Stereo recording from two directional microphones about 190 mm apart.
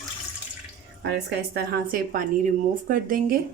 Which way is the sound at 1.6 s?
50° right (ahead or behind).